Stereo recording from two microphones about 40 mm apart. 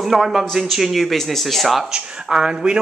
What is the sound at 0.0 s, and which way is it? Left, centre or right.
Speech, centre.